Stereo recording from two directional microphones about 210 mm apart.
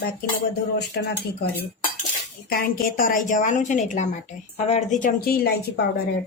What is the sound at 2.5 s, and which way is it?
A woman's voice, 45° left (ahead or behind).